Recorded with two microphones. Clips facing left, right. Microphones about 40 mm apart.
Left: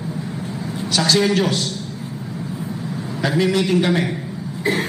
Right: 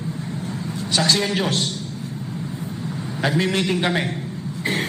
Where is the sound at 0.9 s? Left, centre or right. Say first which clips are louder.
Left 2 dB; centre.